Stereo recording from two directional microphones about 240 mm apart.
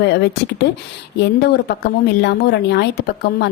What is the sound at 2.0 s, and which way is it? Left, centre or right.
A woman's voice, left.